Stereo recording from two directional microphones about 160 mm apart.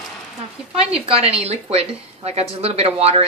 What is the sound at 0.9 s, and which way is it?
A woman's voice, 40° right (ahead or behind).